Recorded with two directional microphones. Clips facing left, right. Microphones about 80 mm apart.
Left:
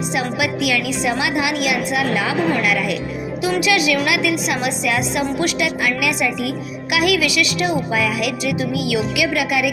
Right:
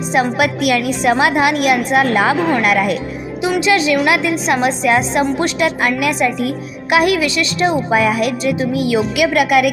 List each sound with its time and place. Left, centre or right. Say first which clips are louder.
0.1 s a woman's voice: right 8 dB; right
3.6 s a woman's voice: right 4 dB; right